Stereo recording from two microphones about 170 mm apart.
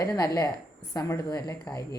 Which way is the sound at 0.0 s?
20° left (ahead or behind).